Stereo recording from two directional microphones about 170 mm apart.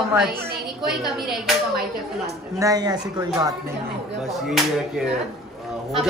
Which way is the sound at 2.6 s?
20° right (ahead or behind).